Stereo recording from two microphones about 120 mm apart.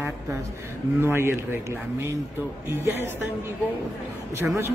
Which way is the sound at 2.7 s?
20° right (ahead or behind).